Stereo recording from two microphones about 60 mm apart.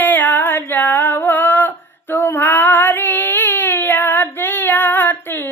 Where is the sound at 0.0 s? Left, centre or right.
Left.